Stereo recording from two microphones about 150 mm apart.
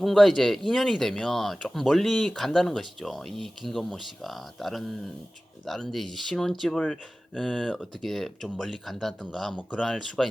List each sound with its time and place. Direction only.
0.0 s speech: centre (ahead or behind)